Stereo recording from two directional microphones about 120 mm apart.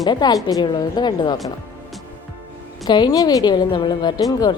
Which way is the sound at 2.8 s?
35° left (ahead or behind).